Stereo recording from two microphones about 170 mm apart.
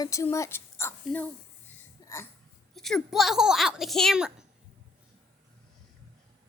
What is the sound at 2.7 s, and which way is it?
A woman's voice, centre (ahead or behind).